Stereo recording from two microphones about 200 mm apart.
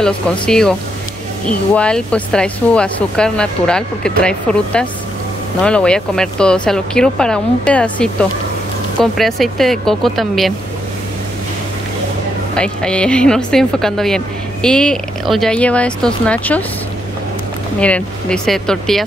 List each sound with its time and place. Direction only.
0.0 s a woman's voice: 5° left (ahead or behind)
12.5 s a woman's voice: 5° left (ahead or behind)
17.7 s a woman's voice: 5° left (ahead or behind)